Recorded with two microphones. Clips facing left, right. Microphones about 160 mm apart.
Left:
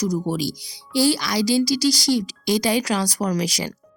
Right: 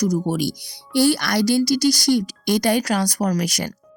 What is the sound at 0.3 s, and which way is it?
Speech, 60° right (ahead or behind).